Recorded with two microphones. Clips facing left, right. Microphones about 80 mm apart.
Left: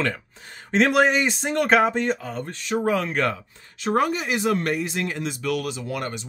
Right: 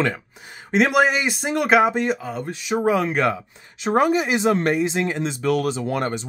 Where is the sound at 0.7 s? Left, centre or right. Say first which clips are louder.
Right 1 dB; centre.